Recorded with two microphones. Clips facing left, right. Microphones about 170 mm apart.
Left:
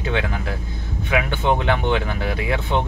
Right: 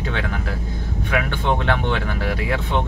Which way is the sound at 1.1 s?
5° left (ahead or behind).